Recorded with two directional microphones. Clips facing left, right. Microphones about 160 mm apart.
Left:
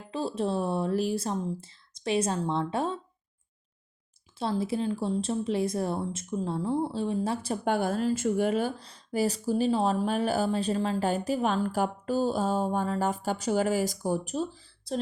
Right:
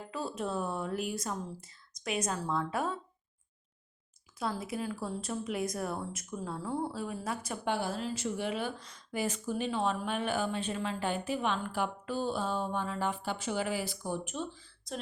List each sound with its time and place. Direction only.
0.1 s speech: 30° left (ahead or behind)
4.4 s speech: 30° left (ahead or behind)
7.6 s speech: 50° left (ahead or behind)